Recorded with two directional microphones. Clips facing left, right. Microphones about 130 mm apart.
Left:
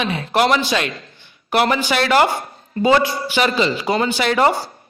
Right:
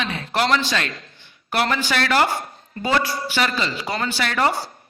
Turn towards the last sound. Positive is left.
turn(degrees=20)  # may be behind; listen again after turning